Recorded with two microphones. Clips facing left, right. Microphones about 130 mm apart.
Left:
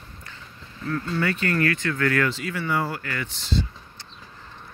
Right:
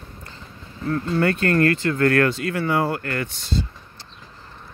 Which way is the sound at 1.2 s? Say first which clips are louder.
Right 6 dB; 40° right (ahead or behind).